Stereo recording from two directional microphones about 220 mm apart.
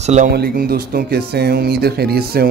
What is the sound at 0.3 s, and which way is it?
A man's voice, 45° right (ahead or behind).